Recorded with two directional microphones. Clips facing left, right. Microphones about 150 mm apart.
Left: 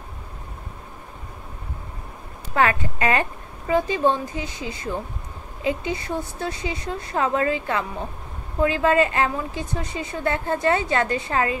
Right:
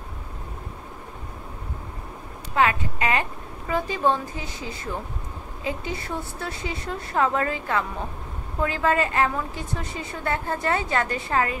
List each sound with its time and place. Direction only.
2.5 s a woman's voice: 40° left (ahead or behind); by 11.5 s 25° left (ahead or behind)